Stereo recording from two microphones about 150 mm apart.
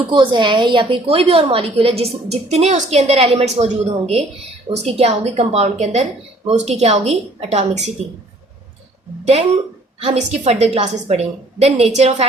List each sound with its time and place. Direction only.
0.1 s a woman's voice: 35° right (ahead or behind)
10.0 s a woman's voice: 45° right (ahead or behind)